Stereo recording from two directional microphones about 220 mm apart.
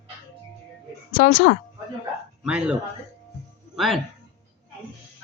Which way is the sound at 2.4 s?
5° right (ahead or behind).